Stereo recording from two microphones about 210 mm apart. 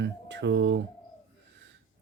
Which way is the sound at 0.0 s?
55° right (ahead or behind).